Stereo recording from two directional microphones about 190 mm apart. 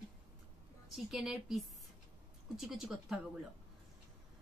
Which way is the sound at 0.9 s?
Centre (ahead or behind).